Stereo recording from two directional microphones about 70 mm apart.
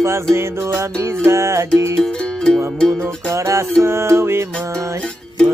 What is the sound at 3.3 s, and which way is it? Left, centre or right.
Music, right.